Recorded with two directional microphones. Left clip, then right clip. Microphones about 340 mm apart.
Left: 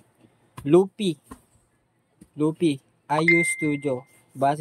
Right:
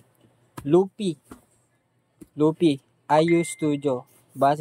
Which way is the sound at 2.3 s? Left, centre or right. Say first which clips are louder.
Right 3 dB; centre.